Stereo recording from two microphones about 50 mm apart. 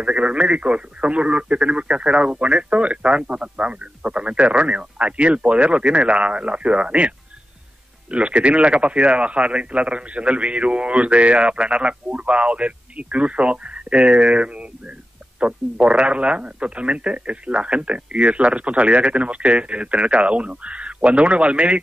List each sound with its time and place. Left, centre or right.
0.0 s speech: right